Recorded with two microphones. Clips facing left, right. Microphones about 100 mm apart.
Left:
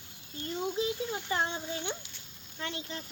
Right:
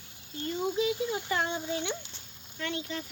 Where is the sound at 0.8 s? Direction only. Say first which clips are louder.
Right 3 dB; 30° left (ahead or behind).